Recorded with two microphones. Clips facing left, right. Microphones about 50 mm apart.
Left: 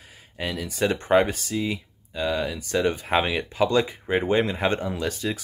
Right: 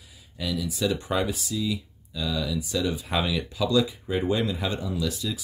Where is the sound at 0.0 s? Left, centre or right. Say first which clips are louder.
Left 2 dB; left.